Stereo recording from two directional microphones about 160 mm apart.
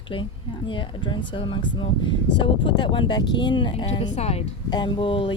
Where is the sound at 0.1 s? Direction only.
30° left (ahead or behind).